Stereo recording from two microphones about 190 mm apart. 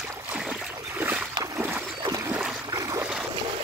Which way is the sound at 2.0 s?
15° right (ahead or behind).